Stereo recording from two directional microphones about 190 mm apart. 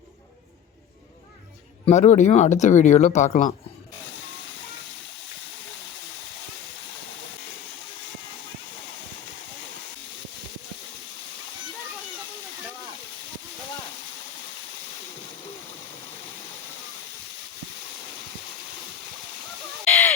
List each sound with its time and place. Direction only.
1.9 s speech: 35° left (ahead or behind)
19.8 s fowl: 10° left (ahead or behind)